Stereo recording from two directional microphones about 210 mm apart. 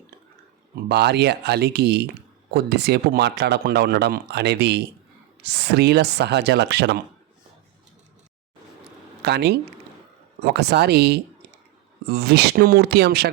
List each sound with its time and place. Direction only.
0.9 s speech: 50° right (ahead or behind)
9.2 s speech: 50° right (ahead or behind)